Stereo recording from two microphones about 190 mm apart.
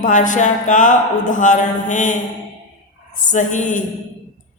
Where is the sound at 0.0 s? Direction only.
40° left (ahead or behind).